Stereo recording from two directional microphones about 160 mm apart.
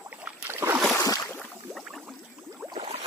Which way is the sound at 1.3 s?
5° left (ahead or behind).